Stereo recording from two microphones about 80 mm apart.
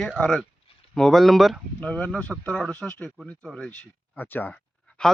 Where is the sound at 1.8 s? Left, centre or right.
Centre.